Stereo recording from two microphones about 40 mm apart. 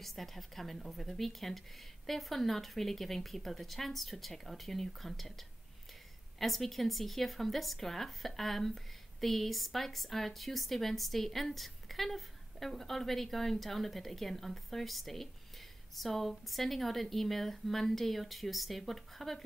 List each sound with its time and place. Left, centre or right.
0.0 s speech: centre
6.4 s speech: centre